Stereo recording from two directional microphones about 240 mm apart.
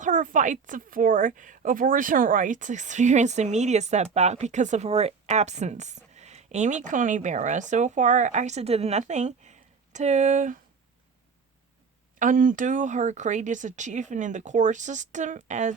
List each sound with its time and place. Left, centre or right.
0.0 s a woman's voice: right
12.2 s speech: right